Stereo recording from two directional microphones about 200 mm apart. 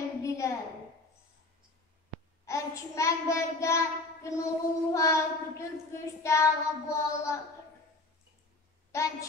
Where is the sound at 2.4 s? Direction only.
15° left (ahead or behind).